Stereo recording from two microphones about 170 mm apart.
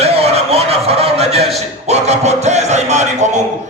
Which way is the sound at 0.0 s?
35° right (ahead or behind).